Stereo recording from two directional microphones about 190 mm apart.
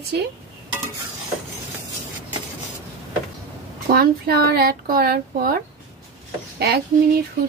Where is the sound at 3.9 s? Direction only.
55° right (ahead or behind).